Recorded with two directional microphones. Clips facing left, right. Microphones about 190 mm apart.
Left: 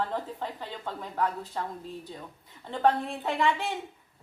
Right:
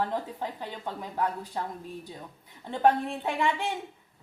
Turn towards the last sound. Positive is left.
turn(degrees=-15)  # may be behind; listen again after turning